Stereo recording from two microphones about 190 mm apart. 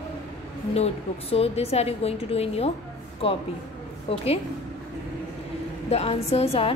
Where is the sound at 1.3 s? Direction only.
30° left (ahead or behind).